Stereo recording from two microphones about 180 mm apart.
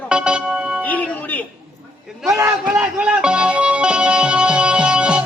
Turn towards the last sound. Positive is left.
turn(degrees=-5)  # may be behind; listen again after turning